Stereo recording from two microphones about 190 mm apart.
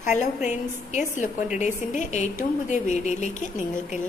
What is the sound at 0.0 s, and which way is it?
A woman's voice, 40° left (ahead or behind).